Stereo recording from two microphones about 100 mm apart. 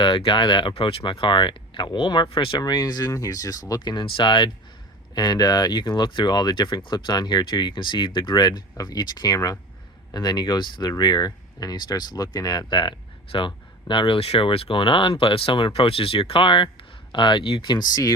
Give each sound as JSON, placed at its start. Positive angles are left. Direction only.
{"t": 0.0, "sound": "speech", "side_deg": 60}
{"t": 2.6, "sound": "speech", "side_deg": 45}